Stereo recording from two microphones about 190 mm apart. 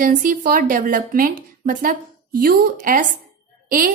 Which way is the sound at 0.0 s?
45° right (ahead or behind).